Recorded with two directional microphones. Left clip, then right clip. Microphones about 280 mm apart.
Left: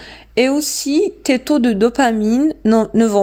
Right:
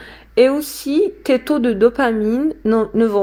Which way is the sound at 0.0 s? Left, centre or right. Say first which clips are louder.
Right 3 dB; left.